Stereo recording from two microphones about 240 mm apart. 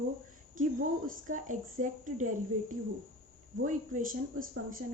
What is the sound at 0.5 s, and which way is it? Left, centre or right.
Speech, right.